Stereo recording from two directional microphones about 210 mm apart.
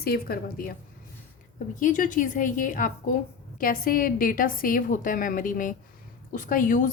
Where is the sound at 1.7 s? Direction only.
40° left (ahead or behind).